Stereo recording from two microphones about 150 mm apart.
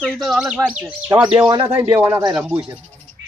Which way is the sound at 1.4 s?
25° right (ahead or behind).